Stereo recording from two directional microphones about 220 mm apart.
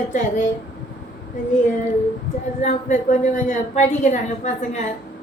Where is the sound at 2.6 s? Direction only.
35° left (ahead or behind).